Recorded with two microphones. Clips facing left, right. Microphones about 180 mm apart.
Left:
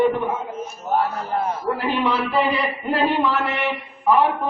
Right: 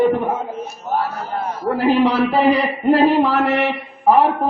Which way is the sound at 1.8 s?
40° right (ahead or behind).